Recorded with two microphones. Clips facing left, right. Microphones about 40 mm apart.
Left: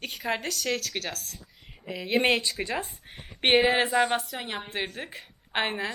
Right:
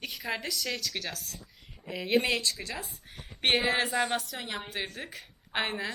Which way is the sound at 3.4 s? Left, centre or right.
Centre.